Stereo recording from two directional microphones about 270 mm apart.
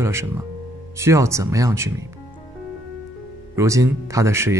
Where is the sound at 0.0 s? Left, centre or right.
Centre.